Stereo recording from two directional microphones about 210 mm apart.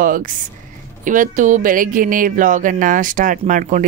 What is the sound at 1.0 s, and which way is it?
Music, 40° right (ahead or behind).